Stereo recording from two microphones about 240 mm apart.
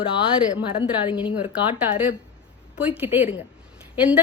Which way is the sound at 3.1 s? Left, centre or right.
Left.